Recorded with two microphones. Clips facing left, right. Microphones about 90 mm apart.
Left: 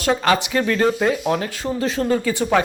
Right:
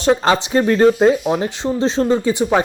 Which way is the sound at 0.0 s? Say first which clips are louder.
Right 3 dB; 25° right (ahead or behind).